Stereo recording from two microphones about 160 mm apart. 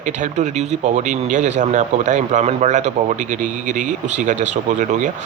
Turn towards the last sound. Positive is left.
turn(degrees=-50)  # may be behind; listen again after turning